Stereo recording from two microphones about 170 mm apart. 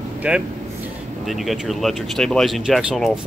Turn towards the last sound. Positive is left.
turn(degrees=-5)  # may be behind; listen again after turning